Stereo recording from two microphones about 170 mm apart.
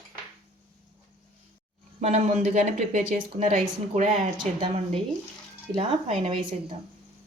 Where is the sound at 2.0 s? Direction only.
45° right (ahead or behind).